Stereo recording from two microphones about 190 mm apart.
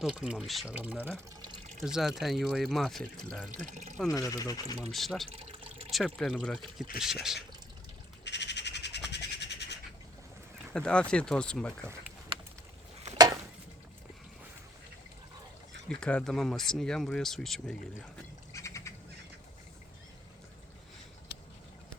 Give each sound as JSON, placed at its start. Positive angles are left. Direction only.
{"t": 0.0, "sound": "speech", "side_deg": -5}
{"t": 3.7, "sound": "speech", "side_deg": -35}
{"t": 4.1, "sound": "speech", "side_deg": 20}
{"t": 4.9, "sound": "speech", "side_deg": 0}
{"t": 5.3, "sound": "drip", "side_deg": -30}
{"t": 5.9, "sound": "speech", "side_deg": 0}
{"t": 8.2, "sound": "bird", "side_deg": 65}
{"t": 10.8, "sound": "speech", "side_deg": 5}
{"t": 13.1, "sound": "a sound", "side_deg": -20}
{"t": 15.9, "sound": "speech", "side_deg": 5}
{"t": 18.5, "sound": "bird", "side_deg": 15}